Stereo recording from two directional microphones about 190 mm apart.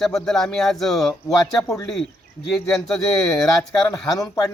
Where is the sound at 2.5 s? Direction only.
Centre (ahead or behind).